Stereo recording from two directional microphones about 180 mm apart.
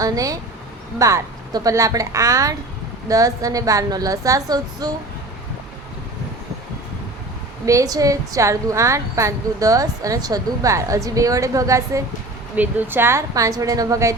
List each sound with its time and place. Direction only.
0.0 s a woman's voice: 20° right (ahead or behind)
7.6 s a woman's voice: 15° right (ahead or behind)